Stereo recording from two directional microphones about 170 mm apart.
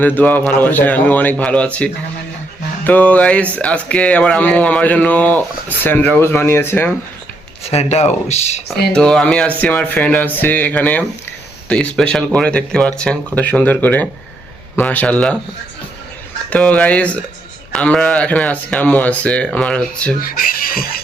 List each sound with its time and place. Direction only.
0.0 s speech: 10° left (ahead or behind)
7.7 s speech: 40° left (ahead or behind)
8.9 s speech: 5° left (ahead or behind)
16.5 s speech: 5° left (ahead or behind)
20.2 s speech: 55° left (ahead or behind)